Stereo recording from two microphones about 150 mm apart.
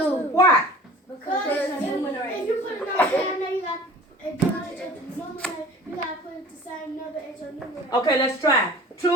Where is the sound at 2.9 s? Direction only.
10° left (ahead or behind).